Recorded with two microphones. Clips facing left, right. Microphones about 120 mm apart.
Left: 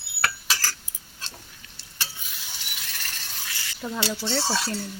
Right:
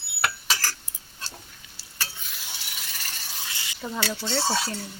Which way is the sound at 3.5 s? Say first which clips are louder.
Left 2 dB; 20° right (ahead or behind).